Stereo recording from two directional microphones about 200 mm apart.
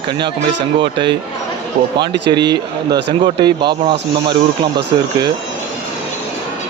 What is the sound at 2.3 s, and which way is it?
A man's voice, 20° right (ahead or behind).